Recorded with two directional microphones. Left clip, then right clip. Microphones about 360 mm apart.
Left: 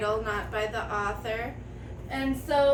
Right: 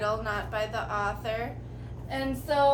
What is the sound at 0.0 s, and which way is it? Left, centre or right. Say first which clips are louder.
A woman's voice: left 1 dB; centre.